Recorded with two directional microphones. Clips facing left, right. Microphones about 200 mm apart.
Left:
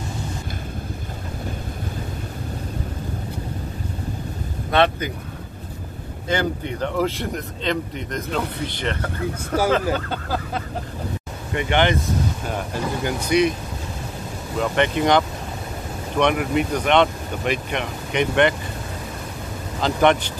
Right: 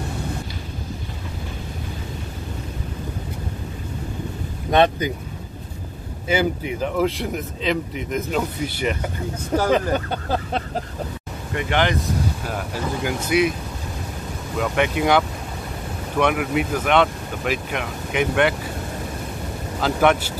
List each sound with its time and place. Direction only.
4.6 s speech: 15° right (ahead or behind)
6.2 s speech: 5° right (ahead or behind)
9.9 s speech: 20° right (ahead or behind)
11.5 s speech: centre (ahead or behind)
14.6 s speech: 5° right (ahead or behind)
19.8 s speech: 5° right (ahead or behind)